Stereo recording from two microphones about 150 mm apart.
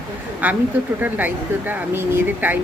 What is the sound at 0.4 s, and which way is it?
Speech, 10° right (ahead or behind).